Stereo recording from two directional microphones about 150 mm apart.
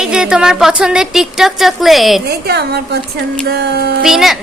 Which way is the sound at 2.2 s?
90° right.